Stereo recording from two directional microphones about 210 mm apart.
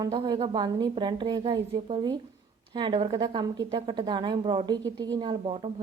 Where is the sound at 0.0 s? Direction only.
20° right (ahead or behind).